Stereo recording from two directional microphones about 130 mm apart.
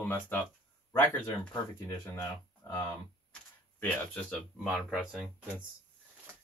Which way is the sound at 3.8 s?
10° left (ahead or behind).